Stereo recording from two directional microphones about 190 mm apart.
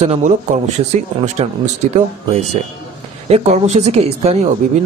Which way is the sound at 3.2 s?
35° right (ahead or behind).